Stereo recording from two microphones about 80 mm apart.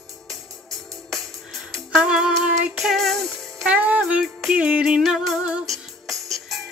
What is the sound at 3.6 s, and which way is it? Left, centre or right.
Music, centre.